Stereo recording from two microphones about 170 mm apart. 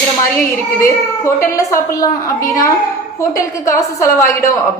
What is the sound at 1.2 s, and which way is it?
A woman's voice, 15° left (ahead or behind).